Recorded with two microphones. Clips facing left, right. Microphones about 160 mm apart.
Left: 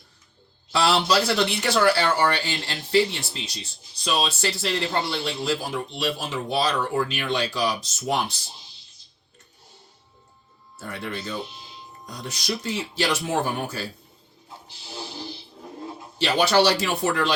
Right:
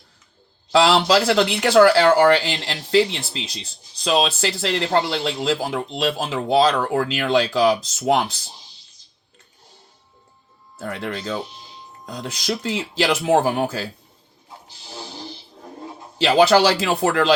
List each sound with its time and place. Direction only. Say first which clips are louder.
0.7 s speech: right 5 dB; 90° right
10.8 s speech: right 5 dB; 90° right
16.1 s speech: right 5 dB; 90° right